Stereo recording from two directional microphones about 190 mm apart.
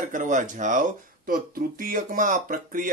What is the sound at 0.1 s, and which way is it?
Speech, 40° right (ahead or behind).